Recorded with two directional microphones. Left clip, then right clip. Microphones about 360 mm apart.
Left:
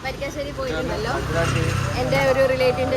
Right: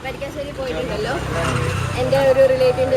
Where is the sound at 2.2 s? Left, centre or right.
Centre.